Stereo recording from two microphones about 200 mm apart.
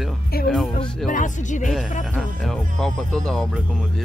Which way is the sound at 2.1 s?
Centre (ahead or behind).